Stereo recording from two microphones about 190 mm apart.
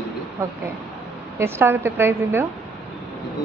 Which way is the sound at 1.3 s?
15° right (ahead or behind).